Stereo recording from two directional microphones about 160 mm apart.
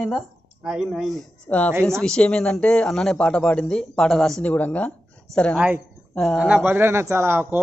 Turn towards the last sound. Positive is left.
turn(degrees=-15)  # may be behind; listen again after turning